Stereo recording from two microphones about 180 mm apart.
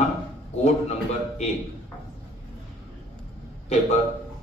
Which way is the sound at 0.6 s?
40° left (ahead or behind).